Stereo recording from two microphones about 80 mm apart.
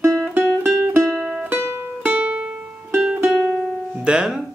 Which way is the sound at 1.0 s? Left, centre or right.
Centre.